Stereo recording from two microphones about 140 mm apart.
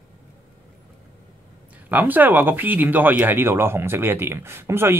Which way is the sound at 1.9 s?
15° right (ahead or behind).